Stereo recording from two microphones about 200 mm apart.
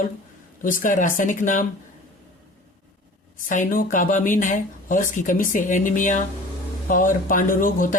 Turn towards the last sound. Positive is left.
turn(degrees=45)  # may be behind; listen again after turning